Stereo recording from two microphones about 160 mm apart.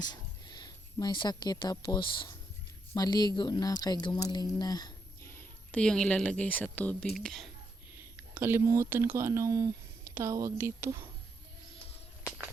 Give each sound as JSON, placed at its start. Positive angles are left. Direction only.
{"t": 0.0, "sound": "speech", "side_deg": 25}
{"t": 8.4, "sound": "speech", "side_deg": -15}